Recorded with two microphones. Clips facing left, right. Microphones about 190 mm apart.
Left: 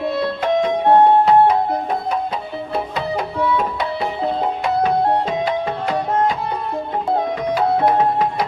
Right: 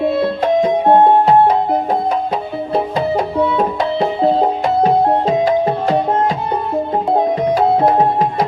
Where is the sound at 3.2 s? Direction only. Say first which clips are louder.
Right 1 dB; 25° right (ahead or behind).